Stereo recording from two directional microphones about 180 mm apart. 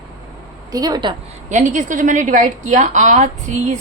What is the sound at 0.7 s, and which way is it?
Speech, 20° right (ahead or behind).